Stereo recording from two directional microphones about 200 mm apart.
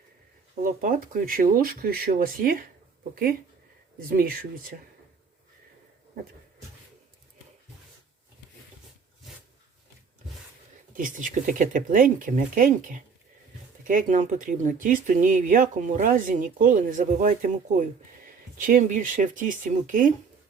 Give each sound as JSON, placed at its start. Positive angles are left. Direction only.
{"t": 0.6, "sound": "speech", "side_deg": -45}
{"t": 10.9, "sound": "speech", "side_deg": -40}